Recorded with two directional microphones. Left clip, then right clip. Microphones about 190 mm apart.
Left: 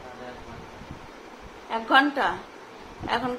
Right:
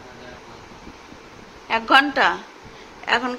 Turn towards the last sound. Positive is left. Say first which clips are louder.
# right 6 dB
turn(degrees=-15)  # may be behind; listen again after turning